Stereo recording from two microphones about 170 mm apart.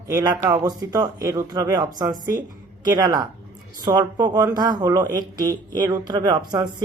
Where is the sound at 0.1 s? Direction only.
25° right (ahead or behind).